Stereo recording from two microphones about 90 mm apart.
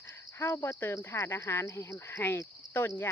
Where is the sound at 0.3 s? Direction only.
30° left (ahead or behind).